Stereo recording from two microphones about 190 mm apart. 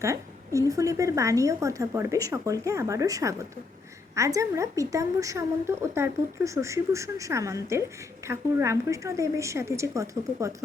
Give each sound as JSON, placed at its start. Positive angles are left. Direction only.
{"t": 0.0, "sound": "a woman's voice", "side_deg": -15}